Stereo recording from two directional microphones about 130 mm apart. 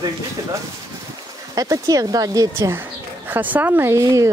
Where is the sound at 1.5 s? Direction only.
30° right (ahead or behind).